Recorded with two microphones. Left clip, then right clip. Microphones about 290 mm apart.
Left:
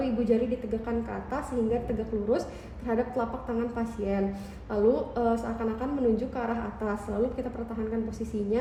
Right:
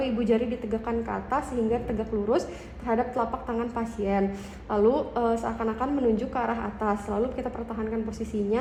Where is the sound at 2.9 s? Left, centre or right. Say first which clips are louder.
Right 3 dB; centre.